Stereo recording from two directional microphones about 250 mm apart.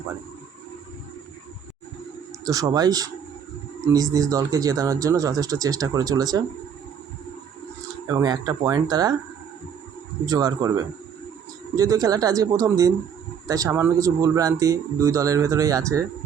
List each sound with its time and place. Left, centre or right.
2.4 s speech: centre
8.0 s speech: centre
10.2 s speech: centre
11.8 s speech: centre